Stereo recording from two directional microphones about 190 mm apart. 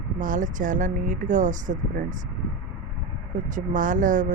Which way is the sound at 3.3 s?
45° right (ahead or behind).